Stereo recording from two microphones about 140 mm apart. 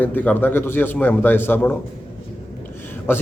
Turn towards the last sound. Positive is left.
turn(degrees=15)  # may be behind; listen again after turning